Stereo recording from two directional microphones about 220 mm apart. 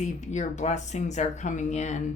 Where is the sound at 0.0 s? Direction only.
30° left (ahead or behind).